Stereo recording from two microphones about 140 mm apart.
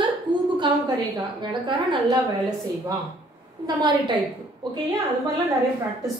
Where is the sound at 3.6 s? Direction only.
30° right (ahead or behind).